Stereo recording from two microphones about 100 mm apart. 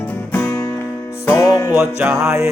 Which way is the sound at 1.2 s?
25° left (ahead or behind).